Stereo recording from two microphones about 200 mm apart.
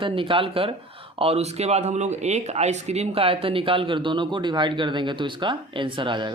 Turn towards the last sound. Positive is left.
turn(degrees=-25)  # may be behind; listen again after turning